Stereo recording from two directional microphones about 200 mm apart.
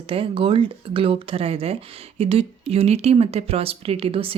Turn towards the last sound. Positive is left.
turn(degrees=-25)  # may be behind; listen again after turning